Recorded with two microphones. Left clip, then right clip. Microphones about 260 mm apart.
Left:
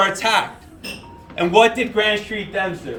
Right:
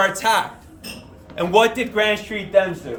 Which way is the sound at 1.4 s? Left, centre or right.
Centre.